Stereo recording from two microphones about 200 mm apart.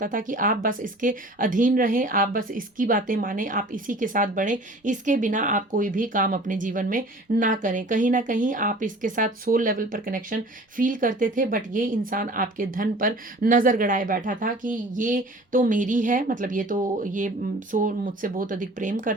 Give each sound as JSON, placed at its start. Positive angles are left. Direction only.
{"t": 0.0, "sound": "speech", "side_deg": -40}